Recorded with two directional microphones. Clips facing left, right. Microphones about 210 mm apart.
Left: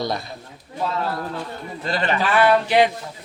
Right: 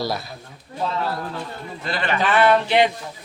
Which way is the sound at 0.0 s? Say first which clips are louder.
Even; 5° right (ahead or behind).